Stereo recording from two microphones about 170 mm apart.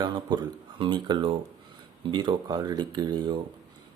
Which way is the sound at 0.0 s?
25° right (ahead or behind).